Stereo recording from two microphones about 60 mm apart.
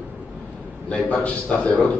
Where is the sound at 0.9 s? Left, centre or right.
Left.